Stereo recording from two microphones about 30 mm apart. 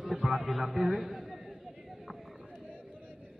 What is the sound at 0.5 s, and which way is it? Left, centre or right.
Speech, centre.